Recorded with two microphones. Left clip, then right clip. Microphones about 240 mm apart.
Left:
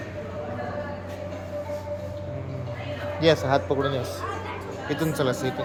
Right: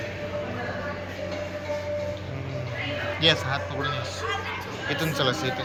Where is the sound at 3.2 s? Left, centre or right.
Left.